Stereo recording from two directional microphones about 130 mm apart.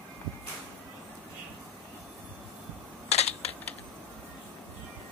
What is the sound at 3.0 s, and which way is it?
Typing, 55° left (ahead or behind).